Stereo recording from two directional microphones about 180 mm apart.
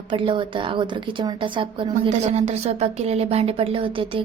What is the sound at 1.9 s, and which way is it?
A woman's voice, 40° right (ahead or behind).